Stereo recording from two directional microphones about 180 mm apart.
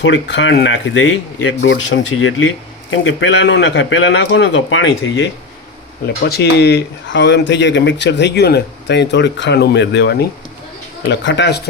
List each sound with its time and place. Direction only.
0.0 s a man's voice: 80° left
6.2 s speech: 65° left (ahead or behind)
11.1 s speech: 85° left